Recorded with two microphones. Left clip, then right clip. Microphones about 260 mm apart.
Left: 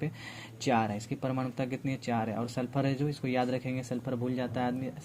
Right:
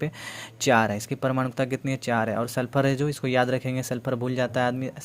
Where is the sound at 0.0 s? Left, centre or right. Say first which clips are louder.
Right 7 dB; right.